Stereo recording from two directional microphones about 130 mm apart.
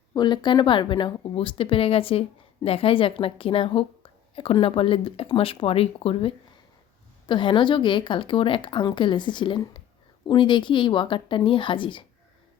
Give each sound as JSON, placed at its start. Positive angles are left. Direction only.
{"t": 0.1, "sound": "a woman's voice", "side_deg": 35}